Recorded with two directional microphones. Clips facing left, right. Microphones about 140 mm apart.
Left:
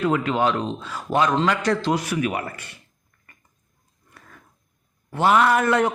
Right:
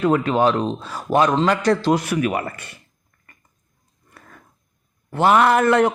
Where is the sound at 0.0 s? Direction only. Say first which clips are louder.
Right 4 dB; 40° right (ahead or behind); by 2.6 s 55° right (ahead or behind).